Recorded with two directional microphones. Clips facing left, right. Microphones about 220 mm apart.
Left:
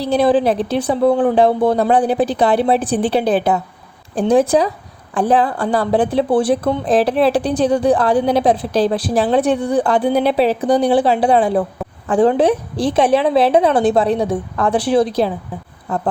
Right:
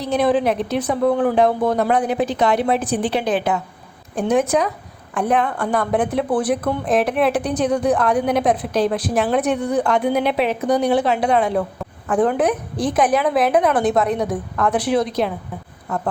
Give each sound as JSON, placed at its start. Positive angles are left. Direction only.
{"t": 0.0, "sound": "speech", "side_deg": 30}